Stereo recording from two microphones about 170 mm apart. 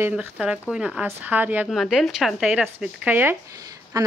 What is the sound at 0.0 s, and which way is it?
A woman's voice, 10° right (ahead or behind).